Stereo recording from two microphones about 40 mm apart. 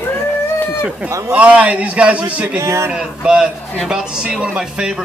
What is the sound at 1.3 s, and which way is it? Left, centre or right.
A man's voice, right.